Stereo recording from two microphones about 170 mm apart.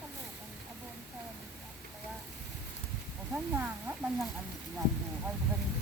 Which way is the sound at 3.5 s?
10° right (ahead or behind).